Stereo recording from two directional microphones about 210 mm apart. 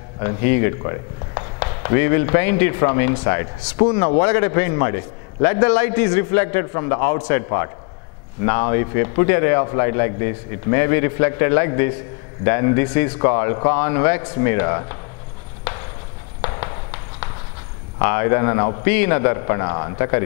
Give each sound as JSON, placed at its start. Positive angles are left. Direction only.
{"t": 0.2, "sound": "speech", "side_deg": 15}
{"t": 4.0, "sound": "a man's voice", "side_deg": 10}
{"t": 16.3, "sound": "fireworks", "side_deg": 20}
{"t": 18.0, "sound": "a man's voice", "side_deg": 15}